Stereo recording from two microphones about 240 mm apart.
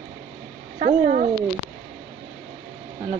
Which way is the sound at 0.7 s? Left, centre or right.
Right.